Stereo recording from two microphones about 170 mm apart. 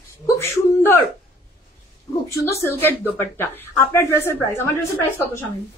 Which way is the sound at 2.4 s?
15° left (ahead or behind).